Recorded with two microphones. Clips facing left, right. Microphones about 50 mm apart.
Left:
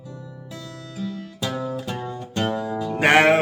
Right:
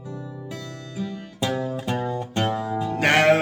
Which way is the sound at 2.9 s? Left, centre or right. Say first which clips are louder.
Left 2 dB; centre.